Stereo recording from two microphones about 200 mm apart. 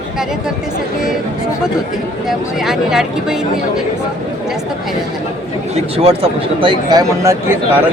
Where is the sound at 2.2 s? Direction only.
Centre (ahead or behind).